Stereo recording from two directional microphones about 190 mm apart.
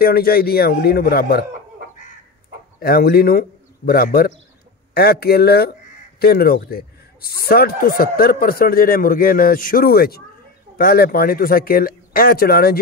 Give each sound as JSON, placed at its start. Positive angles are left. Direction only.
{"t": 0.0, "sound": "a man's voice", "side_deg": 55}
{"t": 2.8, "sound": "a man's voice", "side_deg": 55}